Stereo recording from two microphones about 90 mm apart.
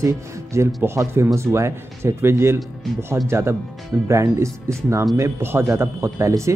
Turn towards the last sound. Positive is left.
turn(degrees=-35)  # may be behind; listen again after turning